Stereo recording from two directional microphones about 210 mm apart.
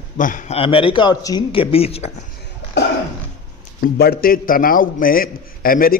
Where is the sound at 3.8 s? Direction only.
45° left (ahead or behind).